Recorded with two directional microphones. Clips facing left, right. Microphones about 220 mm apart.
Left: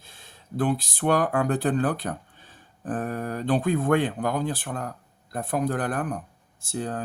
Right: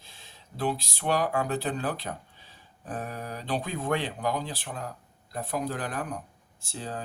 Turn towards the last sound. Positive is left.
turn(degrees=50)  # may be behind; listen again after turning